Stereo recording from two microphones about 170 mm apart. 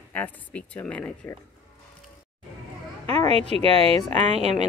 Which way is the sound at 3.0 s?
35° right (ahead or behind).